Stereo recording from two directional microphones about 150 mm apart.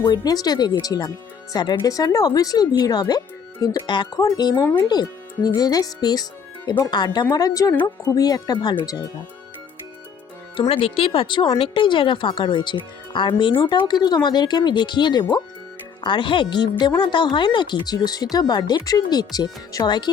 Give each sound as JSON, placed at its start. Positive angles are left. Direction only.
{"t": 0.0, "sound": "speech", "side_deg": 30}
{"t": 10.6, "sound": "speech", "side_deg": 35}